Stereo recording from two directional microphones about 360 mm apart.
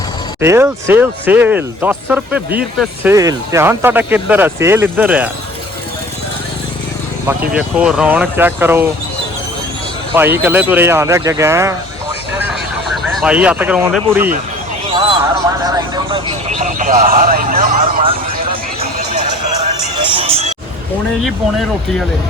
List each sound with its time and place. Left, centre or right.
0.4 s speech: centre
7.3 s speech: centre
10.1 s speech: centre
13.0 s speech: centre
14.8 s horse: centre
16.6 s a sound: right
20.0 s music: centre